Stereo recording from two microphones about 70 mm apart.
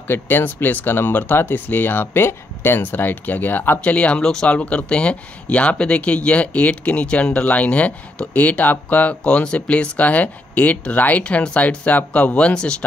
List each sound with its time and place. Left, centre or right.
0.1 s speech: left